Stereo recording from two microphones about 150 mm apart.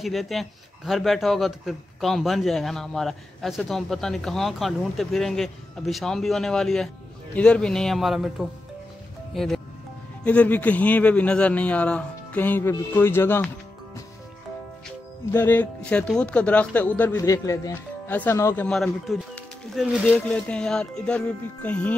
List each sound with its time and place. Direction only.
0.0 s a man's voice: centre (ahead or behind); by 13.5 s 15° left (ahead or behind)
15.3 s a man's voice: 10° left (ahead or behind)
17.2 s a man's voice: 20° left (ahead or behind)
18.7 s speech: centre (ahead or behind)
19.3 s music: centre (ahead or behind)
20.0 s a man's voice: 5° left (ahead or behind)